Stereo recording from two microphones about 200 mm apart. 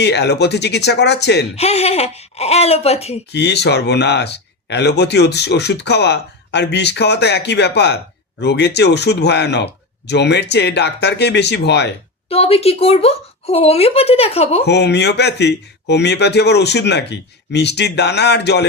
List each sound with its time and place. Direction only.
0.0 s speech: 55° left (ahead or behind)
1.5 s speech: 30° left (ahead or behind)
3.3 s speech: 55° left (ahead or behind)
12.3 s speech: 30° left (ahead or behind)
14.6 s speech: 55° left (ahead or behind)